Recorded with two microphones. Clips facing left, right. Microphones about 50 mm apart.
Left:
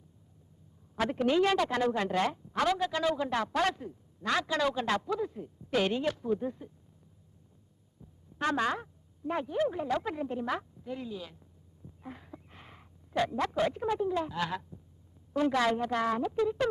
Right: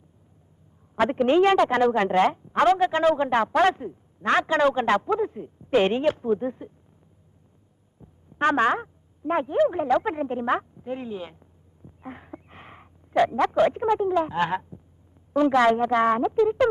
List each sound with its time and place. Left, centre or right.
0.9 s a man's voice: right
8.0 s speech: right
11.9 s a sound: right
14.2 s a man's voice: right